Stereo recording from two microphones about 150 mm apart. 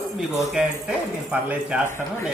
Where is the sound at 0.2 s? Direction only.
5° right (ahead or behind).